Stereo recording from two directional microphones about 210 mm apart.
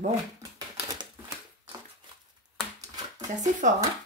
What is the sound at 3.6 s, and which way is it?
Speech, 35° right (ahead or behind).